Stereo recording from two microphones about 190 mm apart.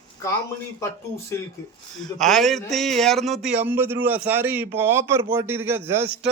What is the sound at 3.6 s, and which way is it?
A man's voice, 10° right (ahead or behind).